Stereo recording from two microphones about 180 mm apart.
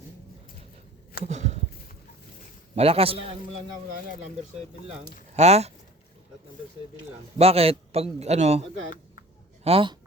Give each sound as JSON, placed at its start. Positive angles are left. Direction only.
{"t": 1.2, "sound": "a sound", "side_deg": -40}
{"t": 2.7, "sound": "a man's voice", "side_deg": -35}
{"t": 4.9, "sound": "a man's voice", "side_deg": -35}
{"t": 7.3, "sound": "a man's voice", "side_deg": -35}
{"t": 9.6, "sound": "speech", "side_deg": -30}